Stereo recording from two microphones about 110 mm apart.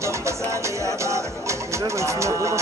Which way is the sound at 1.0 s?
25° right (ahead or behind).